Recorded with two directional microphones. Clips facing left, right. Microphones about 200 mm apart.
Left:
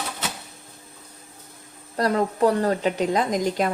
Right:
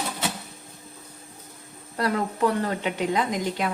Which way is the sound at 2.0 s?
40° left (ahead or behind).